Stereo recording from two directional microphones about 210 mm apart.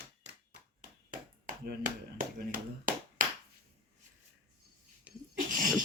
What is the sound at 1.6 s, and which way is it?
Finger snapping, 40° right (ahead or behind).